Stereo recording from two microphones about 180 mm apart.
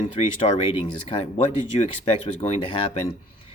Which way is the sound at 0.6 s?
30° left (ahead or behind).